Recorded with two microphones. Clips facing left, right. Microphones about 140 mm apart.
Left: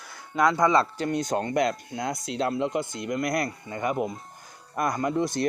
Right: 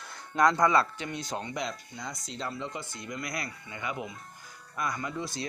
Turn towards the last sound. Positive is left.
turn(degrees=50)  # may be behind; listen again after turning